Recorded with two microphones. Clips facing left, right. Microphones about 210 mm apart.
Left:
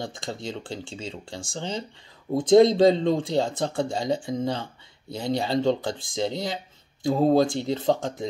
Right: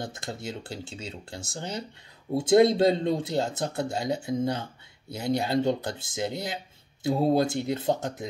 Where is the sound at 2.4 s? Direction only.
5° right (ahead or behind).